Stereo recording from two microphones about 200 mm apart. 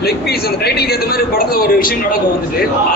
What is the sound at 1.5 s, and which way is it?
Speech, 45° left (ahead or behind).